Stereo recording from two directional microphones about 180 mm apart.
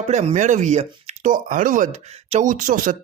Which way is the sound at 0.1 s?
40° right (ahead or behind).